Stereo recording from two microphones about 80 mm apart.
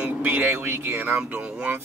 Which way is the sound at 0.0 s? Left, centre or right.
Right.